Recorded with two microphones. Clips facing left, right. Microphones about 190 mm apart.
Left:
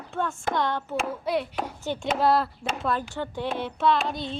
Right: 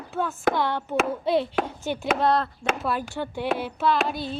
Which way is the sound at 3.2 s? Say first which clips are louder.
Right 1 dB; 10° right (ahead or behind).